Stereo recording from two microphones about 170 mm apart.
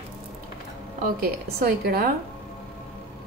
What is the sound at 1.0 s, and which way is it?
A woman's voice, 60° right (ahead or behind).